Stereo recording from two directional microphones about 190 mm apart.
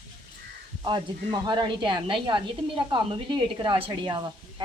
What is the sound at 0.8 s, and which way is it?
A woman's voice, 25° right (ahead or behind).